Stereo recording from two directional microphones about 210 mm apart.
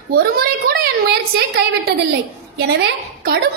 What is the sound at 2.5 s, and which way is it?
Speech, 50° right (ahead or behind).